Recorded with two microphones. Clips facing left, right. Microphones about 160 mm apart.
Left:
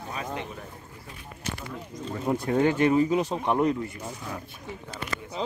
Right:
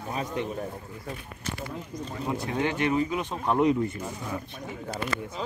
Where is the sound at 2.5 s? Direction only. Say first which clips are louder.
Left 5 dB; 40° left (ahead or behind).